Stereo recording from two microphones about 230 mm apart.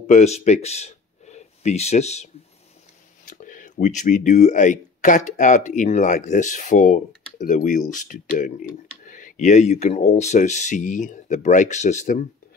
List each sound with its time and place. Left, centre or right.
0.0 s speech: left
3.3 s speech: left